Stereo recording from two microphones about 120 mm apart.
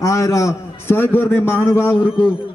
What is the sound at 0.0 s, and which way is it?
A man's voice, 25° left (ahead or behind).